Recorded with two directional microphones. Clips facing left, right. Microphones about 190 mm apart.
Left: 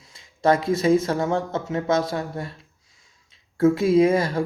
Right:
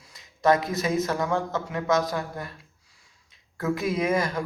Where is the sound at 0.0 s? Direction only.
30° left (ahead or behind).